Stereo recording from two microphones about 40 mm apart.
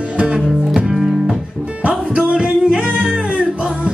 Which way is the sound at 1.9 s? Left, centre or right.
Right.